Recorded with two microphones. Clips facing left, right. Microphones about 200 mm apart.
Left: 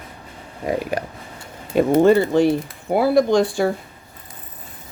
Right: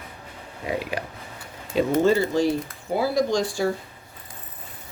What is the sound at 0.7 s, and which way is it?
Speech, 45° left (ahead or behind).